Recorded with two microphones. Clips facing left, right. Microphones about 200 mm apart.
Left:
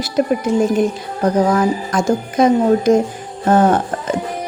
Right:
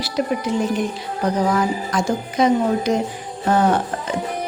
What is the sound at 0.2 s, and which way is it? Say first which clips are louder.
Speech: left 6 dB; 45° left (ahead or behind).